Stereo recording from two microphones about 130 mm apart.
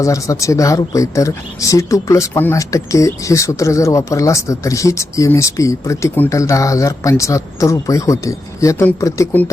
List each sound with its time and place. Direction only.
0.0 s speech: 25° left (ahead or behind)